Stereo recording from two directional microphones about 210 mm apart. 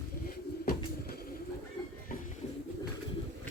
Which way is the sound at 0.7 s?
45° left (ahead or behind).